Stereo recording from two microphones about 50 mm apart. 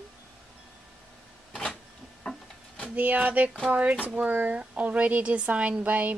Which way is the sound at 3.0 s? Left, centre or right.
Right.